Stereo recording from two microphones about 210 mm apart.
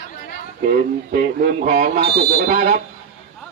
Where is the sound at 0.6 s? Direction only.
40° right (ahead or behind).